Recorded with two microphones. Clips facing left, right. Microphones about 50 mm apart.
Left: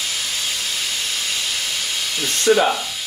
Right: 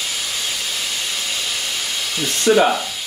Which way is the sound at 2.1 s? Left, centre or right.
Centre.